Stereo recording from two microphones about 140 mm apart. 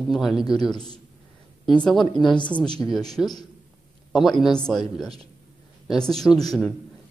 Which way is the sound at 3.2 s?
Centre (ahead or behind).